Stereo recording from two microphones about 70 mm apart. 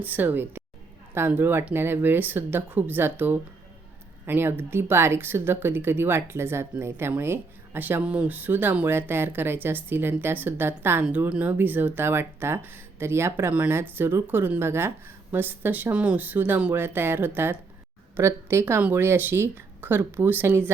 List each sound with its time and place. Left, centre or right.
0.0 s speech: right
8.0 s speech: centre; by 11.0 s right
11.3 s speech: right
16.7 s a woman's voice: right